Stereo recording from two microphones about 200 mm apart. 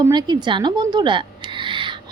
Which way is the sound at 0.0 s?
20° right (ahead or behind).